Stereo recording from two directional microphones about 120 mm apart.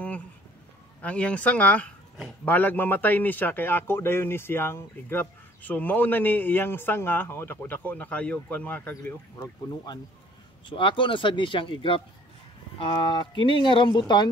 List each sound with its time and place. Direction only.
1.0 s speech: 10° left (ahead or behind)
10.7 s speech: 45° left (ahead or behind)